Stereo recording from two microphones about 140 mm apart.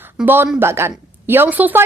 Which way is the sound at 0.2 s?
10° right (ahead or behind).